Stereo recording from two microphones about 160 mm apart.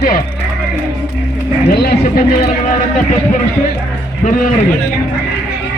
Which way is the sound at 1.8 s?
80° left.